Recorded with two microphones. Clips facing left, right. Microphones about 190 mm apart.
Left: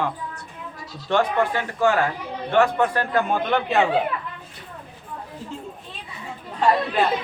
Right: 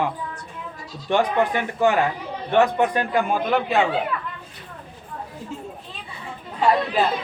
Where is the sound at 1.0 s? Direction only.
15° right (ahead or behind).